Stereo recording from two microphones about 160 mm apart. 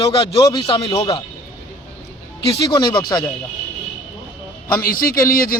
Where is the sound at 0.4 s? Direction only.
30° left (ahead or behind).